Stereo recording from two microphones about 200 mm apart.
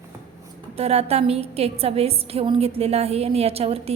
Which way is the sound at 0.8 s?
30° right (ahead or behind).